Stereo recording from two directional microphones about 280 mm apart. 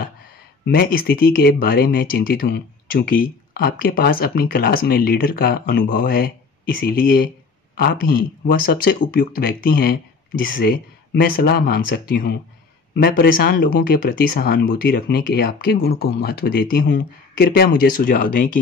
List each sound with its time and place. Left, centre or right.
0.7 s speech: left